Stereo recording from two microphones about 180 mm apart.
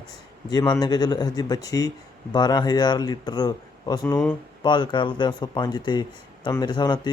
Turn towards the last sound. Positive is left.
turn(degrees=25)  # may be behind; listen again after turning